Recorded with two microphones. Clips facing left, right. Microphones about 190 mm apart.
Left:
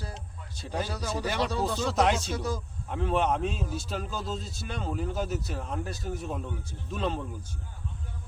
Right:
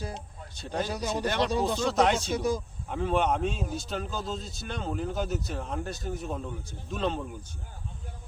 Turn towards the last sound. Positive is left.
turn(degrees=0)  # may be behind; listen again after turning